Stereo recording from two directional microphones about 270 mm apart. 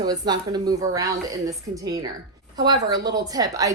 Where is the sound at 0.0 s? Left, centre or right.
Centre.